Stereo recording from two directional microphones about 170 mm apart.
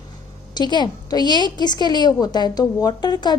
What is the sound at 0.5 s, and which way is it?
Speech, 25° left (ahead or behind).